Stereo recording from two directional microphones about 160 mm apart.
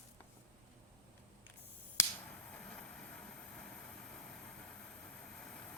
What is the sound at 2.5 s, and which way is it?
Vehicle, 5° left (ahead or behind).